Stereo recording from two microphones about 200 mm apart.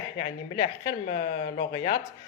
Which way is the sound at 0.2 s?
45° left (ahead or behind).